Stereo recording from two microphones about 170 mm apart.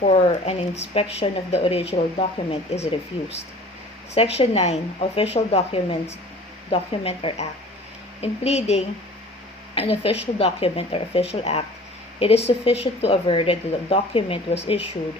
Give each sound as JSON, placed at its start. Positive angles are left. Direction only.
{"t": 0.0, "sound": "speech", "side_deg": 40}
{"t": 4.1, "sound": "speech", "side_deg": 35}